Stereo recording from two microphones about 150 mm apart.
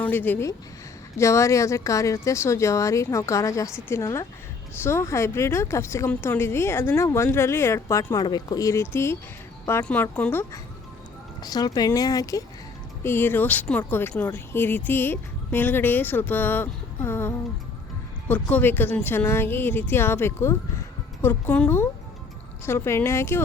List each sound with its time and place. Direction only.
0.0 s speech: 15° left (ahead or behind)
11.4 s speech: 25° left (ahead or behind)